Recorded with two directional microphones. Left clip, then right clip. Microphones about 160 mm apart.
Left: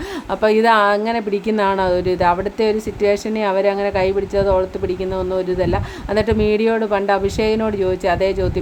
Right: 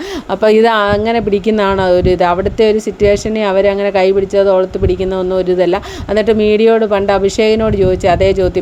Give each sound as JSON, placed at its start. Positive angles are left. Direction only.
{"t": 0.3, "sound": "a woman's voice", "side_deg": -30}
{"t": 0.8, "sound": "speech", "side_deg": -20}